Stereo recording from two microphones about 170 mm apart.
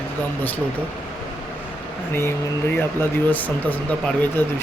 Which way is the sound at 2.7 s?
10° left (ahead or behind).